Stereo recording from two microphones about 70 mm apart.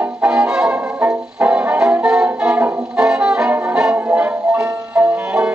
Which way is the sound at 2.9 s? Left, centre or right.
Centre.